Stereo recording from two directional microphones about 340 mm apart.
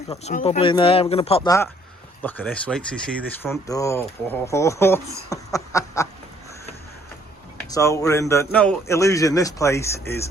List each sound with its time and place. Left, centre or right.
0.1 s speech: centre
7.7 s speech: centre